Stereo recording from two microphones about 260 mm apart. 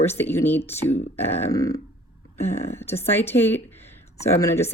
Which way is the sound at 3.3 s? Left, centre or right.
Centre.